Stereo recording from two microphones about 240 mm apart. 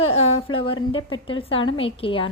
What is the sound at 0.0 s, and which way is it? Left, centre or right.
A woman's voice, left.